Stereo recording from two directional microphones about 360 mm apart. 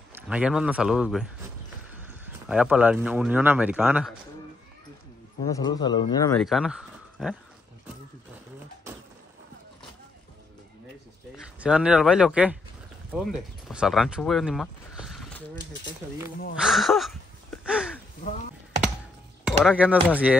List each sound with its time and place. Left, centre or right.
0.3 s speech: centre
2.4 s speech: centre
5.4 s speech: centre
11.3 s speech: centre
16.5 s a sound: centre
19.6 s speech: centre